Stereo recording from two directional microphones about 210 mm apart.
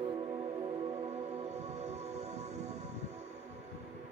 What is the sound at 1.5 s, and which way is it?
Music, 30° right (ahead or behind).